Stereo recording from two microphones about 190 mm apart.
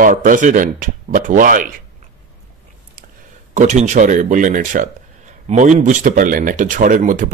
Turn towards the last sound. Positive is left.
turn(degrees=-45)  # may be behind; listen again after turning